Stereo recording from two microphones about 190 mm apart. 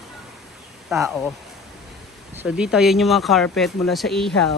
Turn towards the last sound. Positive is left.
turn(degrees=0)  # may be behind; listen again after turning